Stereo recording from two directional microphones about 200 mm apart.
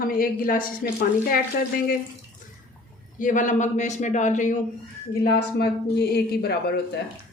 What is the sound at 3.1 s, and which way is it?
A man's voice, 40° left (ahead or behind).